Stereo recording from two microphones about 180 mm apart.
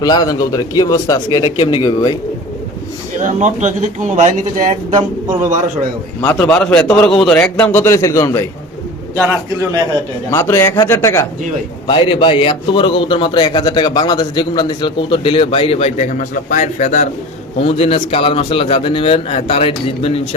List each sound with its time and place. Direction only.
0.0 s a man's voice: 20° left (ahead or behind)
3.2 s speech: 45° right (ahead or behind)
6.3 s a man's voice: 5° left (ahead or behind)
10.3 s a man's voice: 15° left (ahead or behind)
11.9 s a man's voice: 25° left (ahead or behind)